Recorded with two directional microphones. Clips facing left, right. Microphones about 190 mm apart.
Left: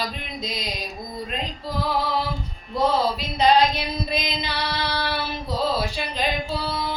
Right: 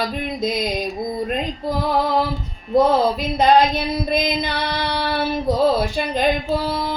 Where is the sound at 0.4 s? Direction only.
50° right (ahead or behind).